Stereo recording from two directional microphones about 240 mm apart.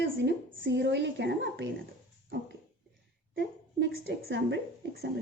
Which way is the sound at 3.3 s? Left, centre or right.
Right.